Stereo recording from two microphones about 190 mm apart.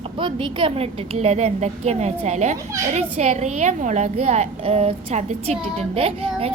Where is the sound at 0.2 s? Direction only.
25° right (ahead or behind).